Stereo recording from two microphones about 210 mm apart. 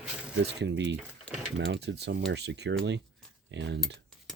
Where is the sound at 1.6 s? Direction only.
55° right (ahead or behind).